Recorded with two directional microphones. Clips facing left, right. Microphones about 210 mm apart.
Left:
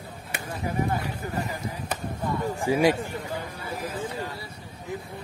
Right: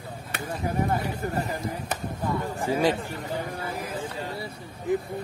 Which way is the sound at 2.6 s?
10° left (ahead or behind).